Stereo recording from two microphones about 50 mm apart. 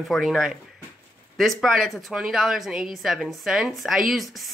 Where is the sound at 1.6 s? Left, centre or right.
Centre.